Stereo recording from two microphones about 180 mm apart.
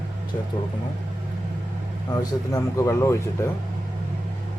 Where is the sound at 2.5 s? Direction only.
15° left (ahead or behind).